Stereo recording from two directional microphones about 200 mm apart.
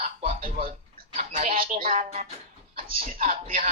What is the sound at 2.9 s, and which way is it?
Speech, 45° right (ahead or behind).